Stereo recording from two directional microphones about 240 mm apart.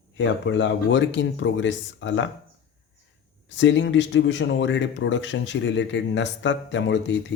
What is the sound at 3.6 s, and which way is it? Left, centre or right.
Speech, left.